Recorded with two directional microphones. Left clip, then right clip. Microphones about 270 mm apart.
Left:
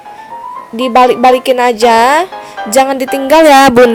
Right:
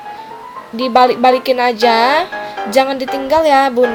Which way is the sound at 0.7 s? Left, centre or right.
Centre.